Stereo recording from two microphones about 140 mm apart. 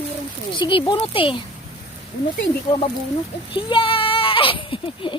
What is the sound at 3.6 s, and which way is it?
Speech, 35° left (ahead or behind).